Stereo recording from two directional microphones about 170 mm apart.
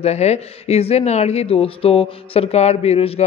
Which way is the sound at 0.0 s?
40° left (ahead or behind).